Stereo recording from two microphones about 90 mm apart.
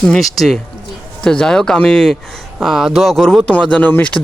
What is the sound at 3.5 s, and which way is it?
Speech, 15° left (ahead or behind).